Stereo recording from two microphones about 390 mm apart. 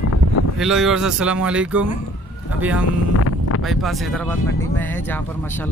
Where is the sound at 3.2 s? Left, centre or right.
Left.